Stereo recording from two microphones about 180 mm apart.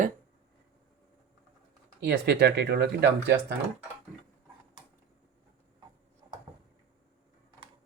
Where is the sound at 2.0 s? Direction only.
65° right (ahead or behind).